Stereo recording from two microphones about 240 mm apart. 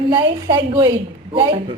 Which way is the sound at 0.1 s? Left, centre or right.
Centre.